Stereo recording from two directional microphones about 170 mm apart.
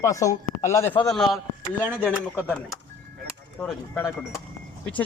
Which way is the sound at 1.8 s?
10° right (ahead or behind).